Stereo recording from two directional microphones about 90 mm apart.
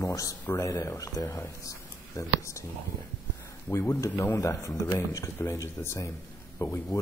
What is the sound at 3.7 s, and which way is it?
Speech, 30° left (ahead or behind).